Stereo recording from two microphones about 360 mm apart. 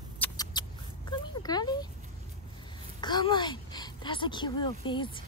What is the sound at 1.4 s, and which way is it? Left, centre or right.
Speech, centre.